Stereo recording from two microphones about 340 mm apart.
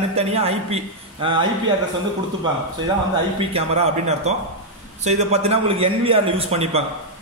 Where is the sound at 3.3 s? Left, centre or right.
Centre.